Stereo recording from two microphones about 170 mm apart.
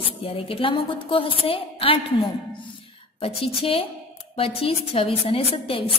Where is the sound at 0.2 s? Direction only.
30° left (ahead or behind).